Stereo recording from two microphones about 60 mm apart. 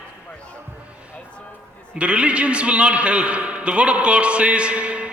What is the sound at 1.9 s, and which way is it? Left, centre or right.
A woman's voice, centre.